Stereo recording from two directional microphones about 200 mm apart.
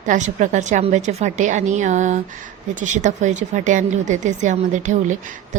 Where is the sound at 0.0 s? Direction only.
40° right (ahead or behind).